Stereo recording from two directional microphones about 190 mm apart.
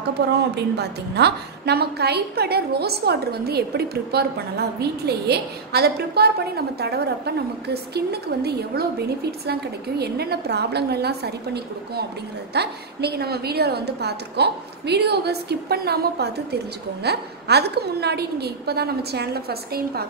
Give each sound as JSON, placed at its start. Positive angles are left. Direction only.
{"t": 0.6, "sound": "a woman's voice", "side_deg": -60}